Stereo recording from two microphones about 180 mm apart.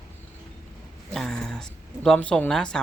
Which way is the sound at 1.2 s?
Centre (ahead or behind).